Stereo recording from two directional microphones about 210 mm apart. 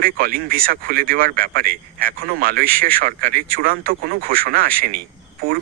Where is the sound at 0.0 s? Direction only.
45° right (ahead or behind).